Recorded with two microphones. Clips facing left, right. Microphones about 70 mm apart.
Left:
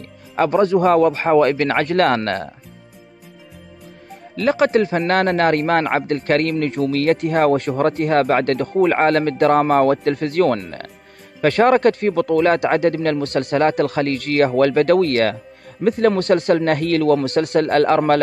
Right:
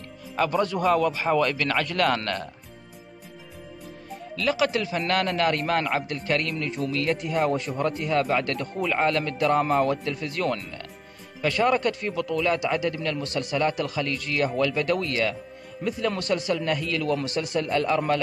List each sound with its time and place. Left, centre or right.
0.4 s speech: left
4.4 s a man's voice: left